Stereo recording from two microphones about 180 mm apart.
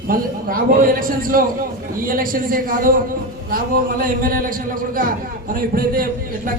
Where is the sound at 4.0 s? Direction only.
50° right (ahead or behind).